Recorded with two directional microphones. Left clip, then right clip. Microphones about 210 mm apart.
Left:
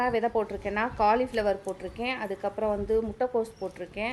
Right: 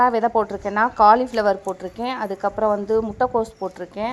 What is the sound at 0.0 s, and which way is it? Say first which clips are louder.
Speech: right 9 dB; 15° right (ahead or behind).